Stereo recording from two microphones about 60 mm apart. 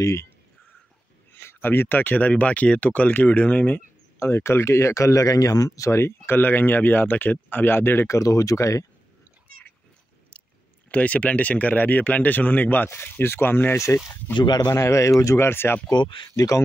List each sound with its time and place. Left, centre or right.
0.0 s speech: left
1.4 s speech: left
4.2 s speech: left
5.9 s speech: left
8.1 s speech: left
10.9 s speech: left
13.7 s speech: left
15.3 s speech: left
16.3 s speech: left